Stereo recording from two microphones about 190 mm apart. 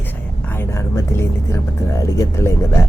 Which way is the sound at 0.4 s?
10° left (ahead or behind).